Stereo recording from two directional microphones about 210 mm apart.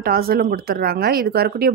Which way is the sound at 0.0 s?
45° right (ahead or behind).